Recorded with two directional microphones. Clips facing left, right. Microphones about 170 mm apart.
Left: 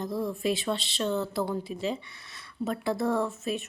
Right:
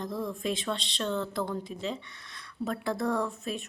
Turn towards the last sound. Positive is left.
turn(degrees=0)  # may be behind; listen again after turning